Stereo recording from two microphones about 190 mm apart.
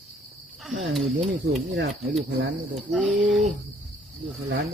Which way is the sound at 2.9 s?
5° right (ahead or behind).